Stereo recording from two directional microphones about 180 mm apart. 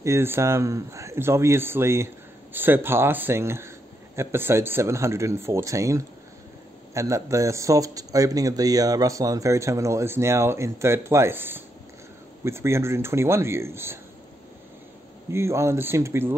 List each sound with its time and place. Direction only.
0.0 s speech: 15° right (ahead or behind)
15.3 s speech: 15° right (ahead or behind)